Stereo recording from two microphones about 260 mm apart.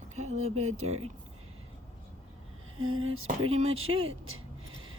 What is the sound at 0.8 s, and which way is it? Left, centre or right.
Speech, right.